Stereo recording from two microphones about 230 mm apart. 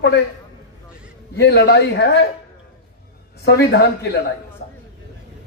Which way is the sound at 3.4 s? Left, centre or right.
Left.